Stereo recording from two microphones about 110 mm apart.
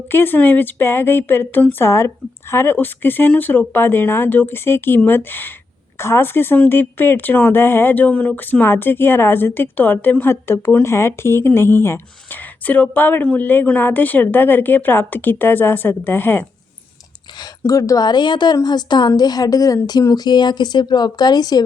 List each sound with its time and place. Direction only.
0.1 s a woman's voice: 20° left (ahead or behind)
17.7 s a woman's voice: 30° left (ahead or behind)